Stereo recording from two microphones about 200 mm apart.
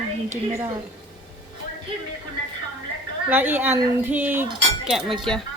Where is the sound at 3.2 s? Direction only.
10° right (ahead or behind).